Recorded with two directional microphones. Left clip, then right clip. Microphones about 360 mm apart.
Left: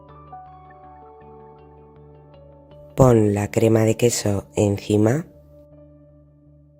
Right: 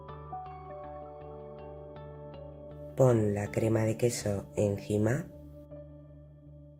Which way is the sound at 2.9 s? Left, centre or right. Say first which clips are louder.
Left 10 dB; left.